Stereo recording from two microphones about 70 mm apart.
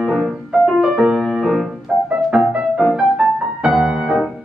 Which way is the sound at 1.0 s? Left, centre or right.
Centre.